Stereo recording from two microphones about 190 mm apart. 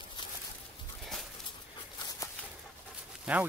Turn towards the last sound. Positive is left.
turn(degrees=-5)  # may be behind; listen again after turning